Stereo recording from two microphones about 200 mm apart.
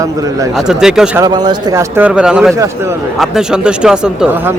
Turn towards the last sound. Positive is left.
turn(degrees=-5)  # may be behind; listen again after turning